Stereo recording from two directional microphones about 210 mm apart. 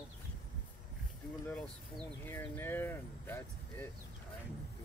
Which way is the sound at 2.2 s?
10° left (ahead or behind).